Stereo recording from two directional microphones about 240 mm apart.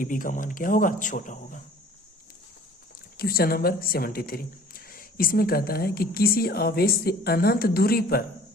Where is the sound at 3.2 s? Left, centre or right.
Left.